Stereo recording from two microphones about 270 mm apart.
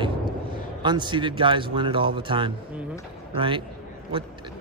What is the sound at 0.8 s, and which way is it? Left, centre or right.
Speech, centre.